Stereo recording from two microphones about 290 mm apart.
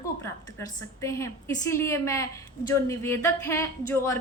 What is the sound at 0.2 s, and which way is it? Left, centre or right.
A woman's voice, centre.